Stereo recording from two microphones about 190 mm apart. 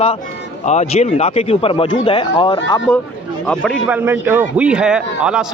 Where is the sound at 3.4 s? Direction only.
5° left (ahead or behind).